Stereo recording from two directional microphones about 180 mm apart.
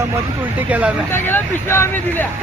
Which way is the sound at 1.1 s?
10° left (ahead or behind).